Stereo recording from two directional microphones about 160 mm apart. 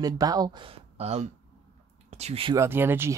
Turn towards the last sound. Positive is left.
turn(degrees=-15)  # may be behind; listen again after turning